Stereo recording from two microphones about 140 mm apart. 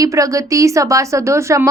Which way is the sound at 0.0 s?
25° right (ahead or behind).